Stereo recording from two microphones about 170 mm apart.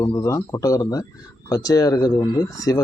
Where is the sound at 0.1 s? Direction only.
20° left (ahead or behind).